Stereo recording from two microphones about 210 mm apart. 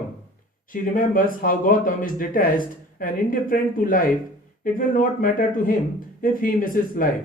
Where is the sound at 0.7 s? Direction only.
40° left (ahead or behind).